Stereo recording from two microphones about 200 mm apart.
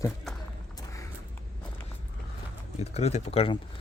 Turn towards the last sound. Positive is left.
turn(degrees=30)  # may be behind; listen again after turning